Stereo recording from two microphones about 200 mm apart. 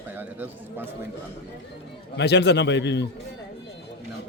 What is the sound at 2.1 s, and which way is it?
Speech, 60° left (ahead or behind).